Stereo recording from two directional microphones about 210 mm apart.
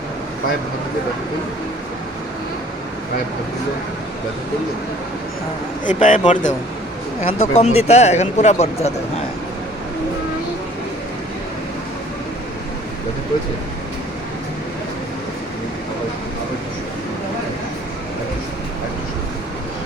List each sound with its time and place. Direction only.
5.8 s speech: 35° left (ahead or behind)